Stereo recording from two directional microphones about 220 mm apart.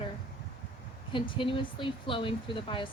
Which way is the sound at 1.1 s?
20° left (ahead or behind).